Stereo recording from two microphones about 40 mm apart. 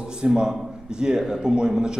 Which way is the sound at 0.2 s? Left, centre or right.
Right.